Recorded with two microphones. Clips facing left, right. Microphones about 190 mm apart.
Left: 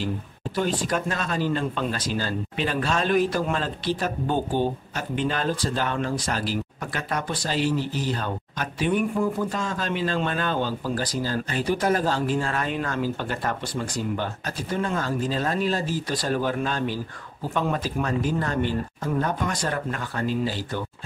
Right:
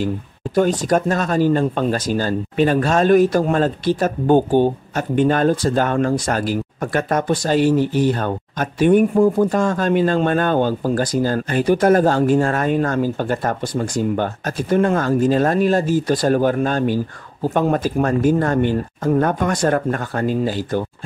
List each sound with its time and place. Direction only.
0.6 s speech: 40° right (ahead or behind)